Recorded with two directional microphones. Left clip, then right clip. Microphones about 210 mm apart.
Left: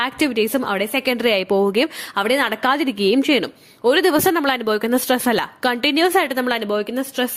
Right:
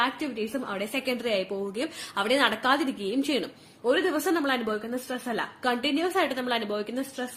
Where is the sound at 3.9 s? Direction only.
55° left (ahead or behind).